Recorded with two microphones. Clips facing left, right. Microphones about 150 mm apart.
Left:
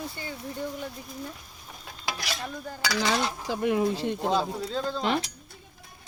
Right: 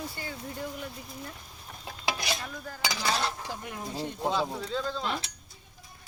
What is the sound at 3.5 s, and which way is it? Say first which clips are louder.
Speech: left 12 dB; 90° left.